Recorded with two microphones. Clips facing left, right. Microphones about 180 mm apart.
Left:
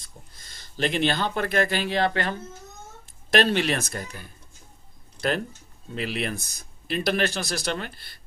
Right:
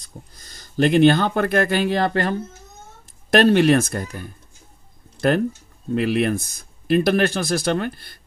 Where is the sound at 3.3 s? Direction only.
50° right (ahead or behind).